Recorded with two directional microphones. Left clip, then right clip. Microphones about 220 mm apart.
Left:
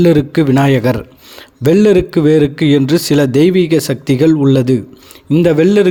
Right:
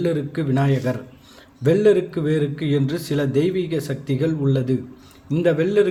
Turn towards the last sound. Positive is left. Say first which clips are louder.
# left 8 dB
turn(degrees=45)  # may be behind; listen again after turning